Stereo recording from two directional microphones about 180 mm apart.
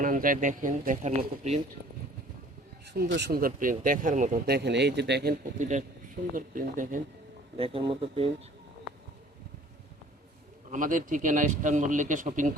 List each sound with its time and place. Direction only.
0.0 s a man's voice: 50° right (ahead or behind)
2.8 s a man's voice: 65° right (ahead or behind); by 4.4 s 45° right (ahead or behind)
4.4 s speech: 65° right (ahead or behind)
5.5 s a man's voice: 40° right (ahead or behind)
7.5 s speech: 30° right (ahead or behind)
10.7 s a man's voice: 50° right (ahead or behind)